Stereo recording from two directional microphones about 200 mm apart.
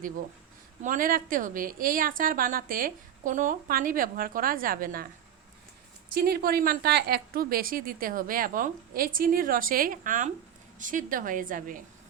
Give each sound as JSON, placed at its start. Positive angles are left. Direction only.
{"t": 0.8, "sound": "a woman's voice", "side_deg": -40}
{"t": 6.1, "sound": "a woman's voice", "side_deg": -50}